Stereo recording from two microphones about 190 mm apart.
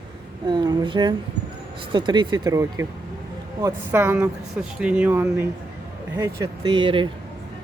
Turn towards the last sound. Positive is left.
turn(degrees=-25)  # may be behind; listen again after turning